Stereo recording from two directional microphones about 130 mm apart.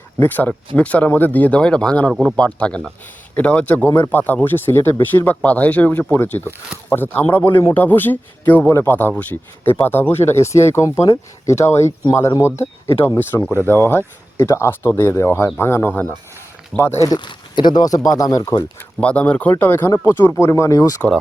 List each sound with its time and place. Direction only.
0.2 s speech: 15° left (ahead or behind)
17.1 s speech: 35° left (ahead or behind)
18.9 s speech: 10° left (ahead or behind); by 21.0 s 25° left (ahead or behind)